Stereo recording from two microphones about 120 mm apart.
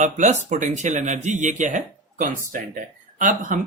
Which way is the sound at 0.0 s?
90° right.